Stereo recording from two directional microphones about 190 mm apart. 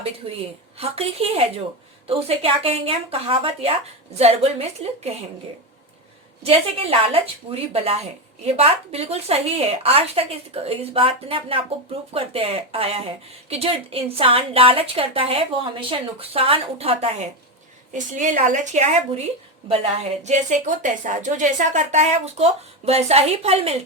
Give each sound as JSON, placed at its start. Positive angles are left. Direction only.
{"t": 0.2, "sound": "a woman's voice", "side_deg": -30}
{"t": 6.4, "sound": "a woman's voice", "side_deg": -30}
{"t": 20.2, "sound": "a woman's voice", "side_deg": -40}